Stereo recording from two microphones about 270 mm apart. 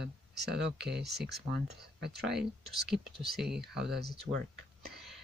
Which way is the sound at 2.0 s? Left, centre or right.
Right.